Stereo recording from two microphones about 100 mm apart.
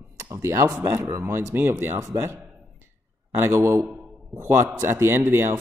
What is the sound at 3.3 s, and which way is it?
Speech, 30° right (ahead or behind).